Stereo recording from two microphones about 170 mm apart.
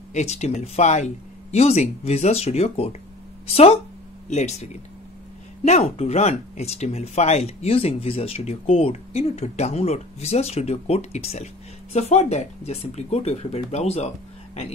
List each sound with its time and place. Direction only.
0.1 s speech: 40° left (ahead or behind)
5.7 s speech: 40° left (ahead or behind)